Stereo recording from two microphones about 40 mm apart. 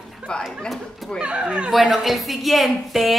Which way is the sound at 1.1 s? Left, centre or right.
Right.